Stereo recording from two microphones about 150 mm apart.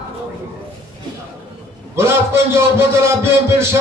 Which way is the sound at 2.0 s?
15° right (ahead or behind).